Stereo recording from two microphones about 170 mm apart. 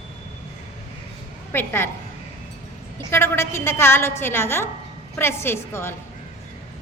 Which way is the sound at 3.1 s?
15° left (ahead or behind).